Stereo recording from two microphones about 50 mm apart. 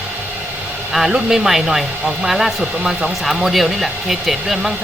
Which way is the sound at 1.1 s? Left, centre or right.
Centre.